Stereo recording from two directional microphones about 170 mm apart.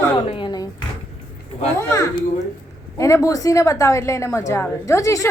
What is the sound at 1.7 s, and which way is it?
A woman's voice, 15° left (ahead or behind).